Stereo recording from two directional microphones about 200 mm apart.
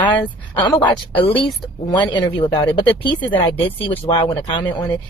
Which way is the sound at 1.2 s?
25° left (ahead or behind).